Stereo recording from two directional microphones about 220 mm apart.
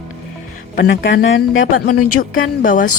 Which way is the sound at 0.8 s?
50° left (ahead or behind).